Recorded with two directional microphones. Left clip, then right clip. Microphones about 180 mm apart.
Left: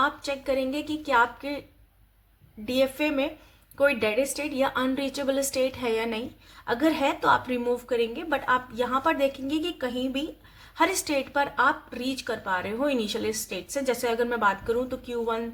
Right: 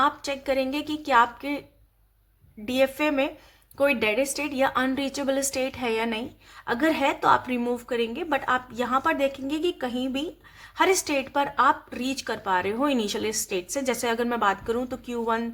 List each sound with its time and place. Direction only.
0.0 s a woman's voice: 35° right (ahead or behind)
2.6 s a woman's voice: 35° right (ahead or behind)